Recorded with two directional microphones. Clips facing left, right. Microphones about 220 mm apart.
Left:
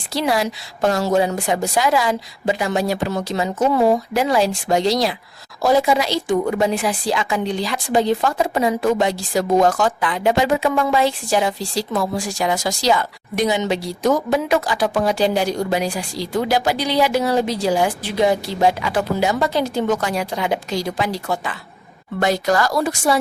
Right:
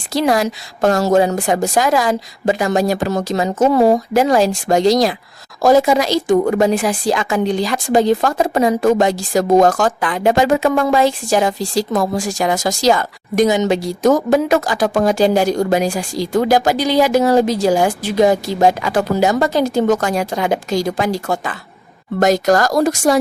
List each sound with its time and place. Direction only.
0.1 s a woman's voice: 45° right (ahead or behind)